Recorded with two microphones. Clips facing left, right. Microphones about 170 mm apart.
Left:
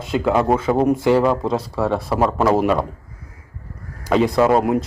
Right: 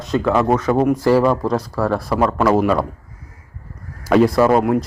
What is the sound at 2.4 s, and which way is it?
Speech, 25° left (ahead or behind).